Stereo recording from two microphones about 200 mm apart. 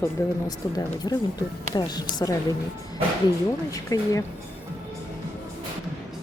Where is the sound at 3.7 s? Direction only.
15° left (ahead or behind).